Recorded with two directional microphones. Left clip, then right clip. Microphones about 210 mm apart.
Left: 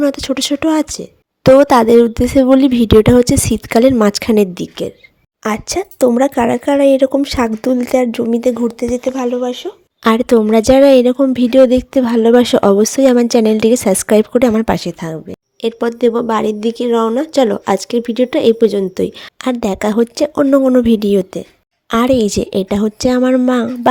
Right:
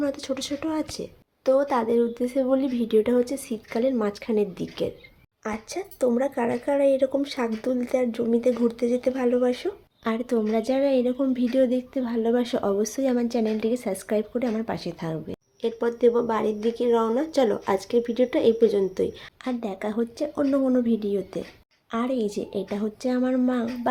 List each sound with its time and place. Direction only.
0.0 s speech: 45° left (ahead or behind); by 9.6 s 20° left (ahead or behind)
10.0 s speech: 50° left (ahead or behind)